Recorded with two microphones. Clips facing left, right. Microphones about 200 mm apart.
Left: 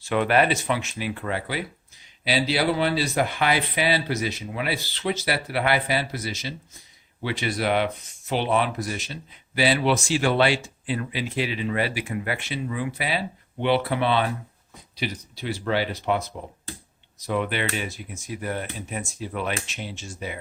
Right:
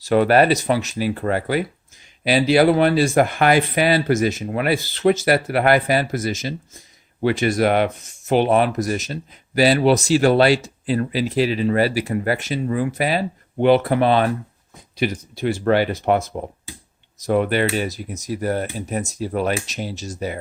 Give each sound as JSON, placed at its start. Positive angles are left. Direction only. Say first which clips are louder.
{"t": 0.0, "sound": "speech", "louder": "right 6 dB", "side_deg": -40}